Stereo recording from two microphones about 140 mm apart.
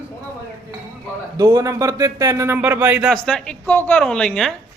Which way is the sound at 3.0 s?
5° left (ahead or behind).